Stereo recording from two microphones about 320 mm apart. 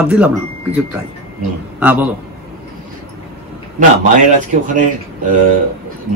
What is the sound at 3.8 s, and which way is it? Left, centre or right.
Speech, right.